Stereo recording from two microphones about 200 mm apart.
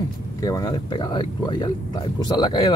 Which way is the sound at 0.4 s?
20° left (ahead or behind).